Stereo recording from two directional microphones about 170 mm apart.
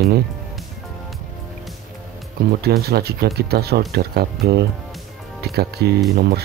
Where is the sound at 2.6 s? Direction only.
70° right (ahead or behind).